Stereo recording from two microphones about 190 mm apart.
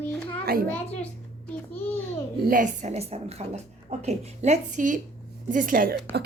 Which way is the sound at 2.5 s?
40° right (ahead or behind).